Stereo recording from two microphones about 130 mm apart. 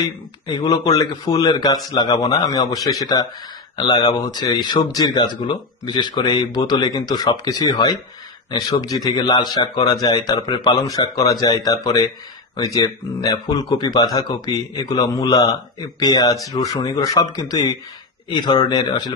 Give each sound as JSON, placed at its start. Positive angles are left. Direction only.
{"t": 0.5, "sound": "speech", "side_deg": 35}